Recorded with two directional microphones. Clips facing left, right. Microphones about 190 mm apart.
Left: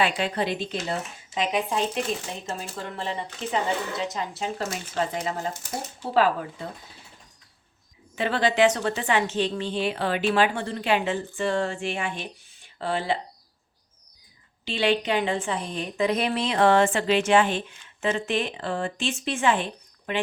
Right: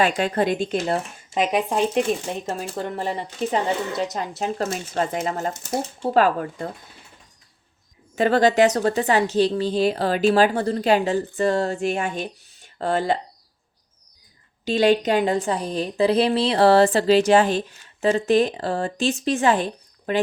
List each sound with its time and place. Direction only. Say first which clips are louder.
0.0 s speech: right 5 dB; 45° right (ahead or behind)
8.1 s a woman's voice: right 7 dB; 45° right (ahead or behind)
14.6 s a woman's voice: right 6 dB; 40° right (ahead or behind)